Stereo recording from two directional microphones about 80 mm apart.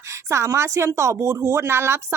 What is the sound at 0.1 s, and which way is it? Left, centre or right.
A woman's voice, right.